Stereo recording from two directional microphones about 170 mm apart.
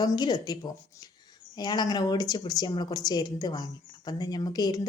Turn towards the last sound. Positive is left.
turn(degrees=25)  # may be behind; listen again after turning